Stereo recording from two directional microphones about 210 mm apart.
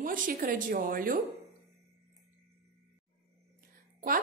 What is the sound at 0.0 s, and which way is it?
A woman's voice, 40° right (ahead or behind).